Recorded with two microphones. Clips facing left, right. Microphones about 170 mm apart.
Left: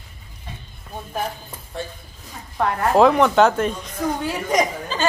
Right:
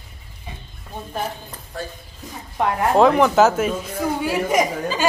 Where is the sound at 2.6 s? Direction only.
15° right (ahead or behind).